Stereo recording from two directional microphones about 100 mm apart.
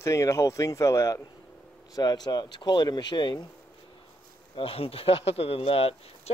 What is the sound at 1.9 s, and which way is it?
Speech, 45° left (ahead or behind).